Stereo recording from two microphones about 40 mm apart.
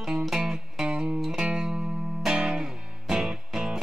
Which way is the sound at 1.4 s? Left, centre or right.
Right.